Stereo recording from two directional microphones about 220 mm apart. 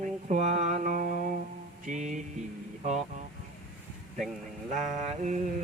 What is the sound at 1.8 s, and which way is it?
Music, 35° right (ahead or behind).